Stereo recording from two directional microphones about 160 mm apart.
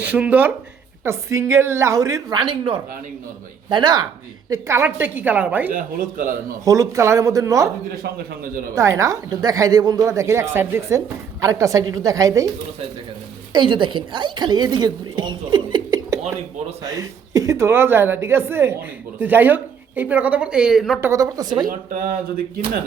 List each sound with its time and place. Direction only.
0.0 s a woman's voice: 10° right (ahead or behind)
5.7 s speech: 60° right (ahead or behind)
6.7 s a woman's voice: 20° right (ahead or behind)
8.7 s a woman's voice: 20° right (ahead or behind)
13.5 s a woman's voice: 30° right (ahead or behind); by 21.0 s centre (ahead or behind)
21.0 s a woman's voice: 20° right (ahead or behind)